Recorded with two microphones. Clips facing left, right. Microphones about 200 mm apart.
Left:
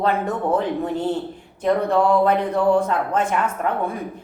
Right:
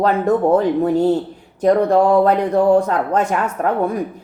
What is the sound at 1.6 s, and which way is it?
A woman's voice, 40° right (ahead or behind).